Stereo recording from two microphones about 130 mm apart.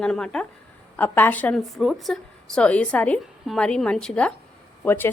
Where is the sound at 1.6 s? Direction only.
Centre (ahead or behind).